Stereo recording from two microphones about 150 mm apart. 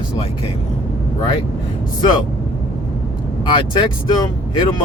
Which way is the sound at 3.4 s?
35° left (ahead or behind).